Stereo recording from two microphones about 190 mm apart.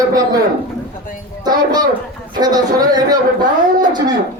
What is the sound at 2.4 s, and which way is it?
Speech, 20° right (ahead or behind).